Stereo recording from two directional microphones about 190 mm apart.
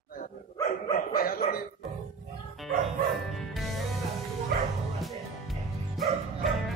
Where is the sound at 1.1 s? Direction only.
50° left (ahead or behind).